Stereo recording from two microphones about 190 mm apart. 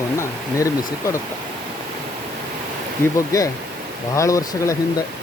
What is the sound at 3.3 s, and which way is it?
Speech, 20° left (ahead or behind).